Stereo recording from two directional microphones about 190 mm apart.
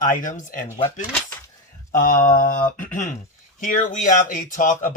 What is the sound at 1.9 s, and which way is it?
Speech, 50° left (ahead or behind).